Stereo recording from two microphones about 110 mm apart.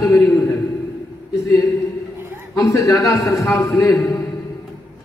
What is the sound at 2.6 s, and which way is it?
A man's voice, 30° left (ahead or behind).